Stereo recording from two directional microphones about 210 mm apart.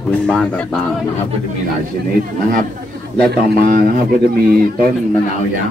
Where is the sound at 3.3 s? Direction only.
40° right (ahead or behind).